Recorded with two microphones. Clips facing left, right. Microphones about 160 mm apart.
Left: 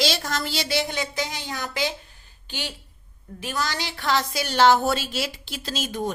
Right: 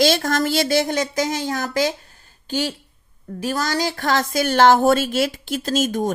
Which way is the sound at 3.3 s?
40° right (ahead or behind).